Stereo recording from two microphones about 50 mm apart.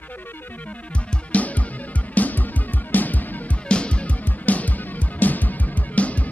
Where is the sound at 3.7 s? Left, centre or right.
Left.